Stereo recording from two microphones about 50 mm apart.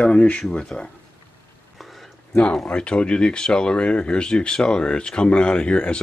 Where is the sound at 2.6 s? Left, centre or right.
Left.